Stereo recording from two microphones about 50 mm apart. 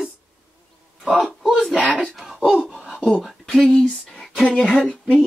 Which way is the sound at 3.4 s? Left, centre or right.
Centre.